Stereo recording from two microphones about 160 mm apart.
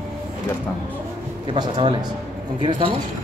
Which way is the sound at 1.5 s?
30° right (ahead or behind).